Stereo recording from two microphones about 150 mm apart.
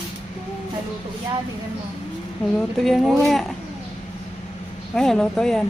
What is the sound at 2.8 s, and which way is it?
Speech, centre (ahead or behind).